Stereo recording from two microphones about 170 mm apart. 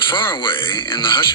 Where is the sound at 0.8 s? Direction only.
30° left (ahead or behind).